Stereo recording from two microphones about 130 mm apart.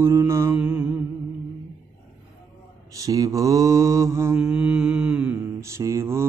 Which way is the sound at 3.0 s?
25° right (ahead or behind).